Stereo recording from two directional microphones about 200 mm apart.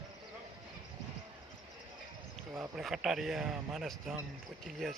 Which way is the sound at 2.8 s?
Centre (ahead or behind).